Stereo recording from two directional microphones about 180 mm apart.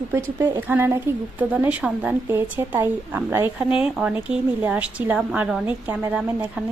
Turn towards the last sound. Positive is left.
turn(degrees=-5)  # may be behind; listen again after turning